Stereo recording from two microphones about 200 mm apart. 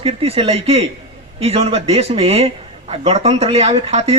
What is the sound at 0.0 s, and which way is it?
A man's voice, 30° right (ahead or behind).